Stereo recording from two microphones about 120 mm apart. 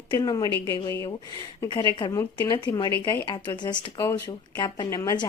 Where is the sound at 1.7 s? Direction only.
40° left (ahead or behind).